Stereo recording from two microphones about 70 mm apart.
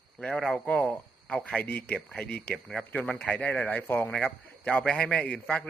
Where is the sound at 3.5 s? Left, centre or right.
Left.